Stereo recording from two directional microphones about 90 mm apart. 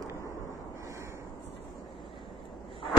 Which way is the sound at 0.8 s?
35° right (ahead or behind).